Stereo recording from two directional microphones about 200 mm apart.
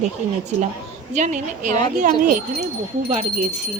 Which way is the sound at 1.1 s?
35° right (ahead or behind).